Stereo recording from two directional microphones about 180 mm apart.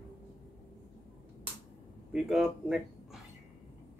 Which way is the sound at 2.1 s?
Centre (ahead or behind).